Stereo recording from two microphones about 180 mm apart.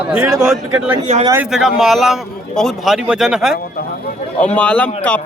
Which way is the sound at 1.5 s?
5° right (ahead or behind).